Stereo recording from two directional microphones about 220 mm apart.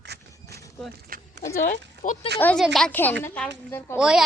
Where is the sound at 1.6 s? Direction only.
35° left (ahead or behind).